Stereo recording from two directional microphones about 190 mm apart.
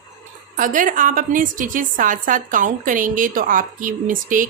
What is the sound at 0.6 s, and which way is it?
A woman's voice, 45° right (ahead or behind).